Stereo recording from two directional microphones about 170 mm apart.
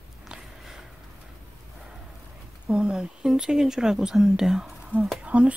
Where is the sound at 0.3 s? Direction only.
5° right (ahead or behind).